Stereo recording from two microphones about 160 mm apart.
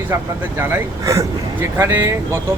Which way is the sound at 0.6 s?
15° right (ahead or behind).